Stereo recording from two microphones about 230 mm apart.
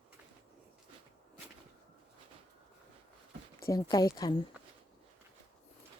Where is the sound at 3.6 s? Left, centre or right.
Centre.